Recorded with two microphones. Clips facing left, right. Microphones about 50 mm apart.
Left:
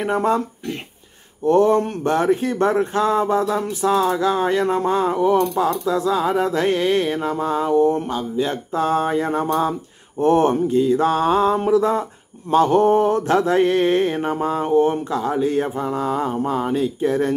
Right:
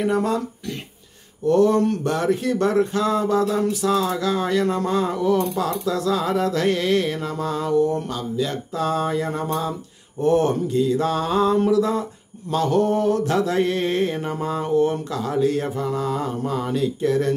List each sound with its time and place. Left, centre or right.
0.0 s mantra: left